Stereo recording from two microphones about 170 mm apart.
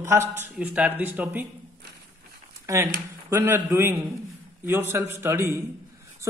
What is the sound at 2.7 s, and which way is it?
A man's voice, 20° right (ahead or behind).